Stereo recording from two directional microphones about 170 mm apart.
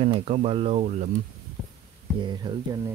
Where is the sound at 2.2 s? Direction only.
25° right (ahead or behind).